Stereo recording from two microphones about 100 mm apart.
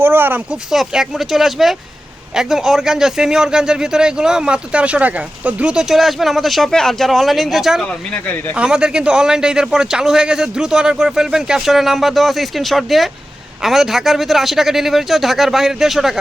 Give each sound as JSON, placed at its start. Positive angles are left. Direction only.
{"t": 0.0, "sound": "speech", "side_deg": -20}
{"t": 0.7, "sound": "a man's voice", "side_deg": 0}
{"t": 8.1, "sound": "speech", "side_deg": 20}
{"t": 8.5, "sound": "a man's voice", "side_deg": -10}